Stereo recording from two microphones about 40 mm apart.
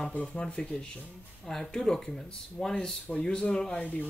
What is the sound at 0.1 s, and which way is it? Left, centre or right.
Speech, left.